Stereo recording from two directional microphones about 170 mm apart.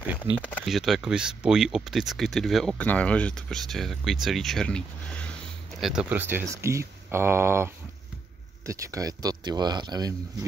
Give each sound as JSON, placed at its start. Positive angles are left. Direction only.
{"t": 0.2, "sound": "speech", "side_deg": 10}
{"t": 5.8, "sound": "speech", "side_deg": -5}